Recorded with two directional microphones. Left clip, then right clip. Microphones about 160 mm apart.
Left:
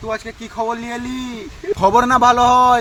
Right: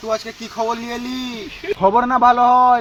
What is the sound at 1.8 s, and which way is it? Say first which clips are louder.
Speech: left 2 dB; 35° left (ahead or behind).